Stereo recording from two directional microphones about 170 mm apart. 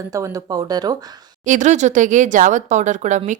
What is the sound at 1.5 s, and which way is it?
Speech, 45° right (ahead or behind).